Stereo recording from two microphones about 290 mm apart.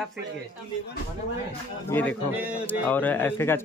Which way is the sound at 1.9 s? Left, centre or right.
Centre.